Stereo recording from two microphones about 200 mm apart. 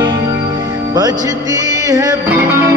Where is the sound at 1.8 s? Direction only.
15° right (ahead or behind).